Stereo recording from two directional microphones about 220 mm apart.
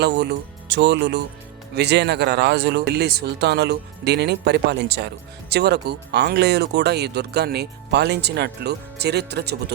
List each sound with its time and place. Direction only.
0.0 s speech: 50° right (ahead or behind)